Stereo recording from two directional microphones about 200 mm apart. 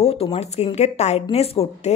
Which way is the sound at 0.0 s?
30° left (ahead or behind).